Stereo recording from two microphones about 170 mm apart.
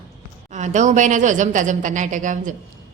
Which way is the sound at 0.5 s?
45° right (ahead or behind).